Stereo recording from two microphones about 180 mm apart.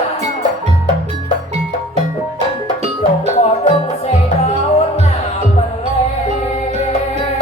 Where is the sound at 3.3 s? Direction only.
40° left (ahead or behind).